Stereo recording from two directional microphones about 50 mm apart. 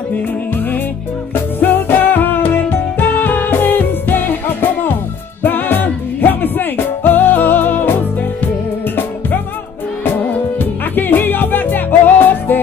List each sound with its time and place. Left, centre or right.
1.3 s music: left
10.6 s music: left